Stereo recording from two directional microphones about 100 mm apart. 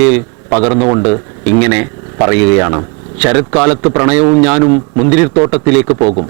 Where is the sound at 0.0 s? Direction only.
15° right (ahead or behind).